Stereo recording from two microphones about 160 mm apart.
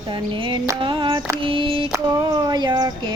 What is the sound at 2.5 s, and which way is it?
Speech, 25° right (ahead or behind).